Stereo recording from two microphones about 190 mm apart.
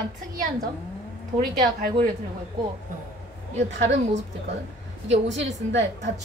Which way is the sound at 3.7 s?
75° right (ahead or behind).